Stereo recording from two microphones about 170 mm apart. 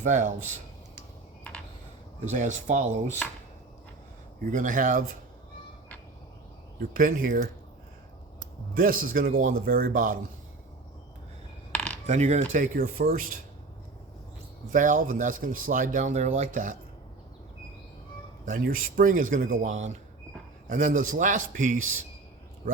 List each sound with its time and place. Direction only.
0.0 s speech: 45° right (ahead or behind)
2.3 s speech: 45° right (ahead or behind)
4.4 s speech: 50° right (ahead or behind)
6.7 s a man's voice: 55° right (ahead or behind)
8.7 s a man's voice: 55° right (ahead or behind)
11.7 s coin: 5° left (ahead or behind)
12.0 s speech: 40° right (ahead or behind)
14.7 s speech: 50° right (ahead or behind)
18.4 s speech: 55° right (ahead or behind)